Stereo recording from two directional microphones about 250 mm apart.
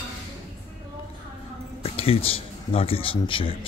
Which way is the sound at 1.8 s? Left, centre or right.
Left.